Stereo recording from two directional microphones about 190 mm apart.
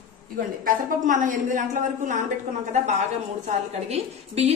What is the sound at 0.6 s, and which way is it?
A woman's voice, 45° right (ahead or behind).